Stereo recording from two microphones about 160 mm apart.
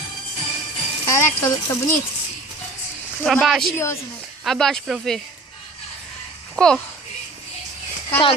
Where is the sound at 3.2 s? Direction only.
Centre (ahead or behind).